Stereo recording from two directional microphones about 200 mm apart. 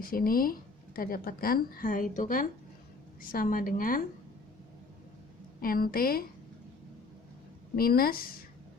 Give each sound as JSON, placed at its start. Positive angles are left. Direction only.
{"t": 0.1, "sound": "a woman's voice", "side_deg": 45}
{"t": 5.6, "sound": "a woman's voice", "side_deg": 45}
{"t": 7.8, "sound": "a woman's voice", "side_deg": 50}